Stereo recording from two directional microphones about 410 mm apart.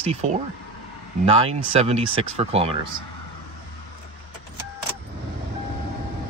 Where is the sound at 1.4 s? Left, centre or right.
Centre.